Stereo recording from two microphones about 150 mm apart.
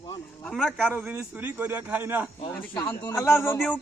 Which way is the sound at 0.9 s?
10° right (ahead or behind).